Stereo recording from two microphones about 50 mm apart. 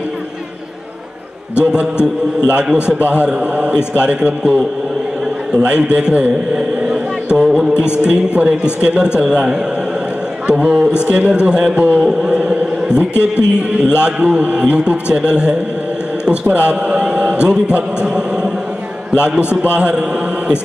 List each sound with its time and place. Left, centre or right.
1.5 s a man's voice: right
5.5 s a sound: right
8.0 s a man's voice: right
12.1 s chant: centre
13.2 s a man's voice: centre